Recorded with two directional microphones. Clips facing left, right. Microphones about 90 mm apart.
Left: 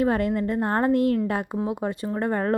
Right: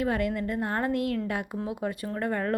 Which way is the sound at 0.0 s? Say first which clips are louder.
Left 5 dB; 35° left (ahead or behind).